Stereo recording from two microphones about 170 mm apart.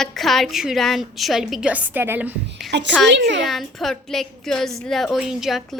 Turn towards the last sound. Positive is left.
turn(degrees=0)  # may be behind; listen again after turning